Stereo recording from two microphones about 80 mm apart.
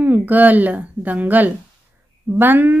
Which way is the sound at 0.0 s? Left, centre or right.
Right.